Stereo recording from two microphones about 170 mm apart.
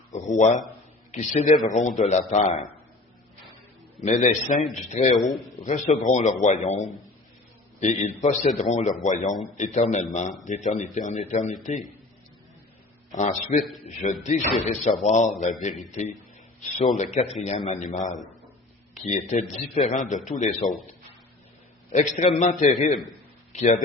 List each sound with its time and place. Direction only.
0.1 s a man's voice: 45° left (ahead or behind)
4.0 s a man's voice: 45° left (ahead or behind)
13.1 s a man's voice: 45° left (ahead or behind)
21.9 s a man's voice: 45° left (ahead or behind)